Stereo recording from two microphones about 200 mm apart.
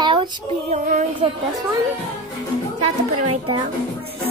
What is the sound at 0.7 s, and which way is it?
Child singing, 40° right (ahead or behind).